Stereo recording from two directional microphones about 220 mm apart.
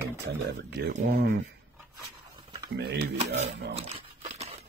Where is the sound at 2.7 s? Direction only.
50° right (ahead or behind).